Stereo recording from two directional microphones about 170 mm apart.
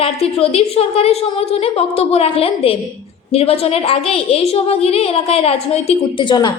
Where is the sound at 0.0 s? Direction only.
35° left (ahead or behind).